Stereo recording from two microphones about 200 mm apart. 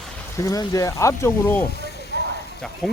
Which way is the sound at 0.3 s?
15° left (ahead or behind).